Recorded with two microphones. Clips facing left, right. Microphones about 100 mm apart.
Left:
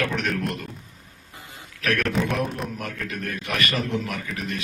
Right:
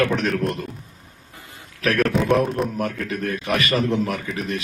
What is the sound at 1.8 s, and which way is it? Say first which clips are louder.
A man's voice: right 4 dB; 35° right (ahead or behind).